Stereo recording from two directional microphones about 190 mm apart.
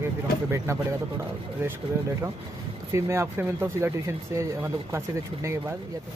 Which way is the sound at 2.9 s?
15° right (ahead or behind).